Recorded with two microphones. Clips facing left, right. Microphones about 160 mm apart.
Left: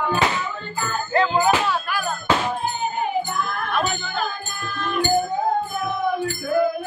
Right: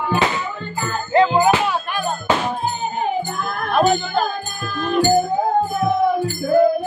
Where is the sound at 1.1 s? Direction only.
20° right (ahead or behind).